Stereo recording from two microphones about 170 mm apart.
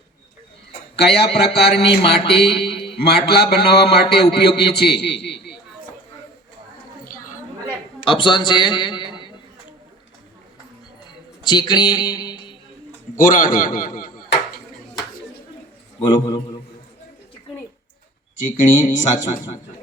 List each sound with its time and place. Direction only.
0.9 s a man's voice: 70° left (ahead or behind)
8.0 s a man's voice: 30° left (ahead or behind)
11.4 s speech: 25° left (ahead or behind)
13.1 s a man's voice: 55° left (ahead or behind)
16.0 s a man's voice: 30° left (ahead or behind)
18.4 s speech: 50° left (ahead or behind)